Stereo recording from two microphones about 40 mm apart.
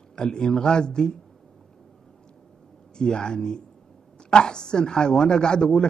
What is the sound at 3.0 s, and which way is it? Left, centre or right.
Speech, centre.